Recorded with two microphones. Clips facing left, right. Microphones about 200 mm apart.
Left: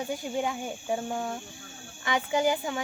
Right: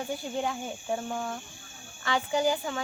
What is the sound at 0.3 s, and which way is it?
Speech, 10° left (ahead or behind).